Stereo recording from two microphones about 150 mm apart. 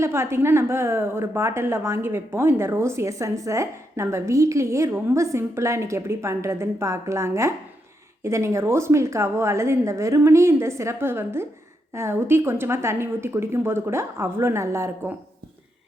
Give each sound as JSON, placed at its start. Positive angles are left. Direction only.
{"t": 0.0, "sound": "a woman's voice", "side_deg": -20}